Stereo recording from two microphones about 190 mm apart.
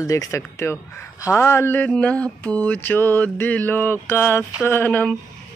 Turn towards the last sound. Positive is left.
turn(degrees=10)  # may be behind; listen again after turning